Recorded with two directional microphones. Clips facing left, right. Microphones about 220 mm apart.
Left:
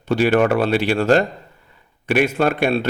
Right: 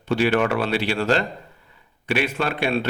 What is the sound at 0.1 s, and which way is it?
A man's voice, 45° left (ahead or behind).